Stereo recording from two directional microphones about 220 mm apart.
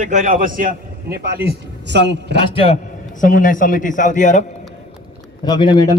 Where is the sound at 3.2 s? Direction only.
35° left (ahead or behind).